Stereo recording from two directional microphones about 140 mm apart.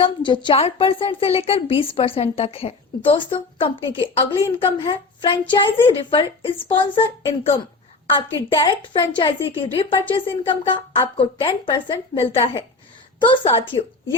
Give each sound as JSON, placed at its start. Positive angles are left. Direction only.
{"t": 0.0, "sound": "a woman's voice", "side_deg": 35}